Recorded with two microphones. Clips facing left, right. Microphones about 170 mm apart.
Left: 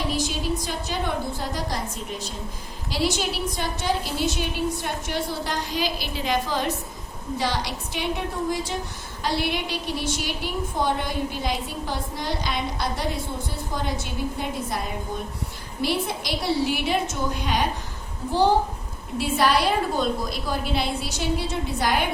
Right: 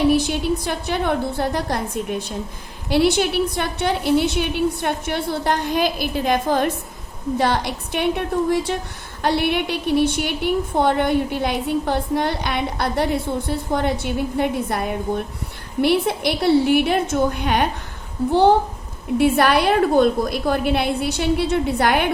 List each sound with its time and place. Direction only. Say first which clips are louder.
0.1 s a woman's voice: right 8 dB; 60° right (ahead or behind)